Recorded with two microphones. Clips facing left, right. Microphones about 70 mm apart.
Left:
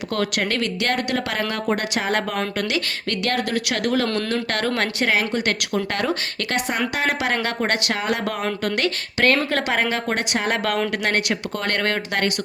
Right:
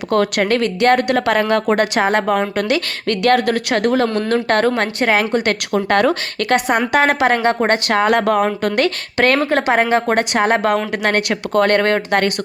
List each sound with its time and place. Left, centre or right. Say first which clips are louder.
0.1 s a woman's voice: right 8 dB; right
2.0 s speech: right 6 dB; right
2.6 s a woman's voice: right 6 dB; right
7.4 s a woman's voice: right 8 dB; right
7.9 s a woman's voice: right 9 dB; right
9.5 s speech: right 7 dB; right
9.9 s a woman's voice: right 8 dB; right
11.2 s a woman's voice: right 9 dB; right